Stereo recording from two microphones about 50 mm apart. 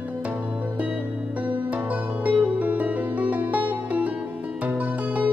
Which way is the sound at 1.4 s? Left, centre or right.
Right.